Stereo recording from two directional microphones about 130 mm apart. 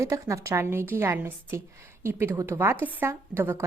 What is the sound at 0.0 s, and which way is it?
Speech, 25° right (ahead or behind).